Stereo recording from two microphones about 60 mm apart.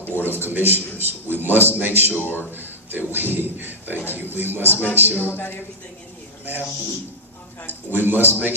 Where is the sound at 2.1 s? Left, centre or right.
Left.